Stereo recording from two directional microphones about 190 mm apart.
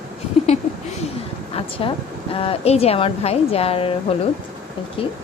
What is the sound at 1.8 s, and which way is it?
A woman's voice, 30° left (ahead or behind).